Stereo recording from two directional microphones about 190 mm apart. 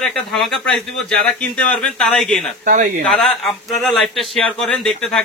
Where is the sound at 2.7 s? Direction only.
50° right (ahead or behind).